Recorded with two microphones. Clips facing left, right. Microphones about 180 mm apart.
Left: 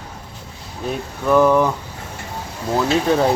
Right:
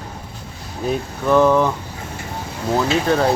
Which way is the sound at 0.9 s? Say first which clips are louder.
Even; 5° left (ahead or behind).